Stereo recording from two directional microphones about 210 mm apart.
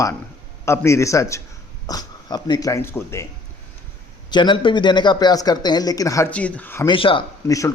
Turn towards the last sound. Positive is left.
turn(degrees=15)  # may be behind; listen again after turning